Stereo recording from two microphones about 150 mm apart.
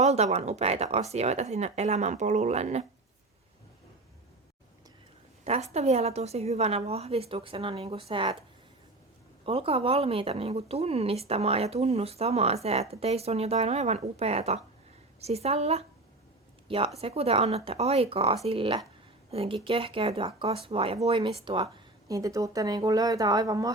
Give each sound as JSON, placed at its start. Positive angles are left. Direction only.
{"t": 0.0, "sound": "speech", "side_deg": -45}
{"t": 5.5, "sound": "speech", "side_deg": -45}
{"t": 9.5, "sound": "a woman's voice", "side_deg": -40}
{"t": 22.1, "sound": "speech", "side_deg": -20}